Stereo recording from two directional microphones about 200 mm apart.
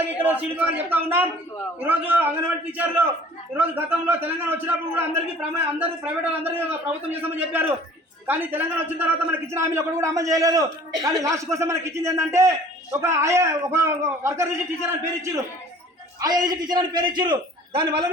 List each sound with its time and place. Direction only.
0.2 s a man's voice: 10° right (ahead or behind); by 17.8 s 25° right (ahead or behind)